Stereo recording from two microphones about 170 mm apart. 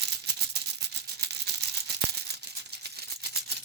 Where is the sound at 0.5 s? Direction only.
75° right (ahead or behind).